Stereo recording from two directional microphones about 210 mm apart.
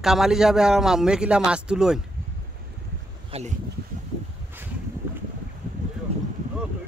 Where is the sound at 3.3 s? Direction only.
30° right (ahead or behind).